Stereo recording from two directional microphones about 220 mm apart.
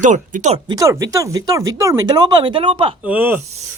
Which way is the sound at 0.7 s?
15° right (ahead or behind).